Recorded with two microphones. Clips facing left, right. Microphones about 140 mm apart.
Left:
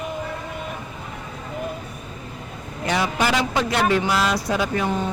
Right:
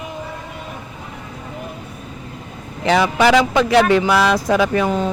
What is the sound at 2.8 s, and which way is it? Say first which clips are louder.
Speech: right 7 dB; 90° right.